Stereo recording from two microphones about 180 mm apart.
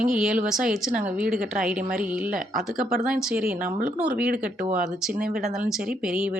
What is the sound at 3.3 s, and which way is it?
Speech, 55° right (ahead or behind).